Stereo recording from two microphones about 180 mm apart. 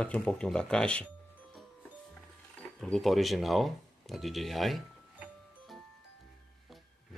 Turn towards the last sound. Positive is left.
turn(degrees=0)  # may be behind; listen again after turning